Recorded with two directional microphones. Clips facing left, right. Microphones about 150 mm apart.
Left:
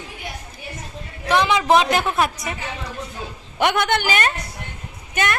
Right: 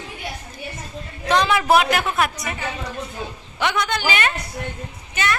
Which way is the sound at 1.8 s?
30° left (ahead or behind).